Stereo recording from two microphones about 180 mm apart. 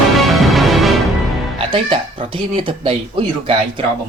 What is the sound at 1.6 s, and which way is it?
Speech, 30° right (ahead or behind).